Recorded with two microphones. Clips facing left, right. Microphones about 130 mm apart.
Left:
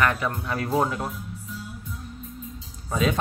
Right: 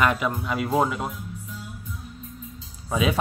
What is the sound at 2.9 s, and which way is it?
Speech, 5° right (ahead or behind).